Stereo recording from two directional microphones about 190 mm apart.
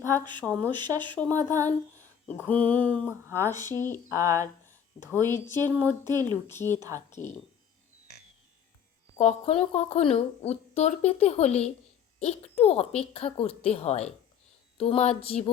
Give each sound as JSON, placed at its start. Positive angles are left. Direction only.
{"t": 0.0, "sound": "speech", "side_deg": -20}
{"t": 0.4, "sound": "mantra", "side_deg": 5}
{"t": 0.7, "sound": "speech", "side_deg": -25}
{"t": 1.1, "sound": "mantra", "side_deg": 10}
{"t": 3.2, "sound": "speech", "side_deg": -15}
{"t": 3.7, "sound": "mantra", "side_deg": 10}
{"t": 4.1, "sound": "speech", "side_deg": -15}
{"t": 5.5, "sound": "speech", "side_deg": -15}
{"t": 6.5, "sound": "mantra", "side_deg": 10}
{"t": 7.1, "sound": "speech", "side_deg": 35}
{"t": 9.1, "sound": "a woman's voice", "side_deg": 35}